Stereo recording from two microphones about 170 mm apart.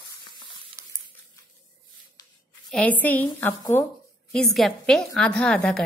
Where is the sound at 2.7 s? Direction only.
10° left (ahead or behind).